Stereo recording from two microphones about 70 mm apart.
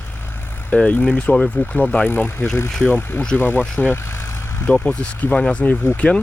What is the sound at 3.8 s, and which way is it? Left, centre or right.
Vehicle, left.